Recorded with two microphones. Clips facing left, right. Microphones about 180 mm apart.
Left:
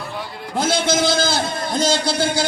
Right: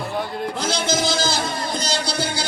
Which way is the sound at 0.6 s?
50° left (ahead or behind).